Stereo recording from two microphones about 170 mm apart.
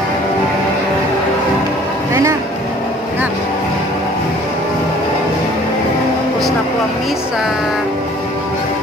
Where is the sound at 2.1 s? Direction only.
20° right (ahead or behind).